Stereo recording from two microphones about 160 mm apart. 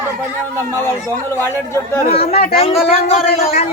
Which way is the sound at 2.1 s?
40° left (ahead or behind).